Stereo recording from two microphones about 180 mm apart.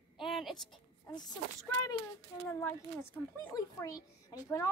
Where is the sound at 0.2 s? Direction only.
Centre (ahead or behind).